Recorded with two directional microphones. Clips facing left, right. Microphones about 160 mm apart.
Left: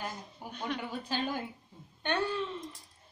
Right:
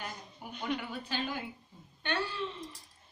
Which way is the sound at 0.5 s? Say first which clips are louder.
Right 1 dB; centre (ahead or behind).